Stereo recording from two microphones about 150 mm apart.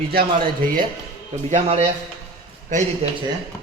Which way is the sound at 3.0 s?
40° right (ahead or behind).